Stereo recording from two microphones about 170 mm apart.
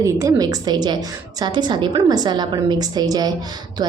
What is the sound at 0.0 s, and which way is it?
A woman's voice, 20° right (ahead or behind).